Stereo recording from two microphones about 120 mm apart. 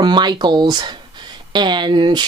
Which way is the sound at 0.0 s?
40° right (ahead or behind).